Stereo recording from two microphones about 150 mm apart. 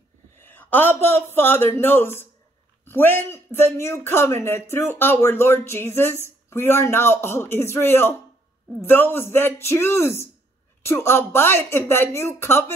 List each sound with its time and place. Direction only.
0.4 s a man's voice: 15° left (ahead or behind)